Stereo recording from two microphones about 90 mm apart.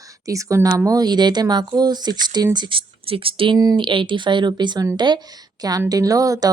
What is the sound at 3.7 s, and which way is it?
Speech, 65° right (ahead or behind).